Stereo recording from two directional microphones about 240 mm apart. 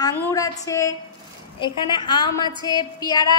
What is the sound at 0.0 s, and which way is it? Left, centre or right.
A woman's voice, centre.